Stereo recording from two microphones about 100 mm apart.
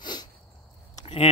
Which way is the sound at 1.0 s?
90° left.